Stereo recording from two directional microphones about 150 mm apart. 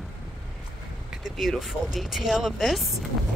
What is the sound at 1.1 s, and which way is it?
Speech, centre (ahead or behind).